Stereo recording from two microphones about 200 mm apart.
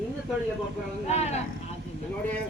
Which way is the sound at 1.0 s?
35° left (ahead or behind).